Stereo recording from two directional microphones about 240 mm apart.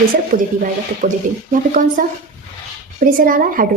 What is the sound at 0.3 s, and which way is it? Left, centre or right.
A woman's voice, right.